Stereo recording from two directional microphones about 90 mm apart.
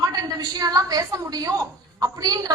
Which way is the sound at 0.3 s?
45° right (ahead or behind).